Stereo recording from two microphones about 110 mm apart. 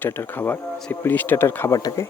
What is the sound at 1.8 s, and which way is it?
Speech, 35° left (ahead or behind).